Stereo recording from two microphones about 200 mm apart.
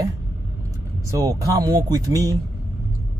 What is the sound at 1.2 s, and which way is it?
Speech, 15° right (ahead or behind).